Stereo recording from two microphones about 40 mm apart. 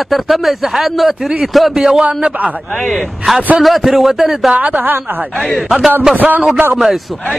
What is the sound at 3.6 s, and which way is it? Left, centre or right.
Speech, centre.